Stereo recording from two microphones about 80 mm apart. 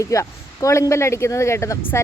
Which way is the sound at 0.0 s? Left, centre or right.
Left.